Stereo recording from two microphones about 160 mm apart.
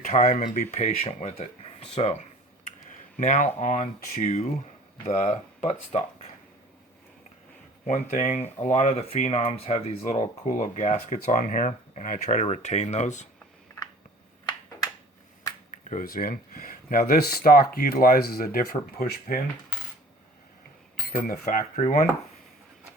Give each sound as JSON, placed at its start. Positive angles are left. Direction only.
{"t": 0.0, "sound": "speech", "side_deg": 50}
{"t": 3.2, "sound": "speech", "side_deg": 50}
{"t": 7.9, "sound": "speech", "side_deg": 45}
{"t": 15.7, "sound": "speech", "side_deg": 55}
{"t": 21.1, "sound": "speech", "side_deg": 70}
{"t": 21.4, "sound": "speech", "side_deg": 50}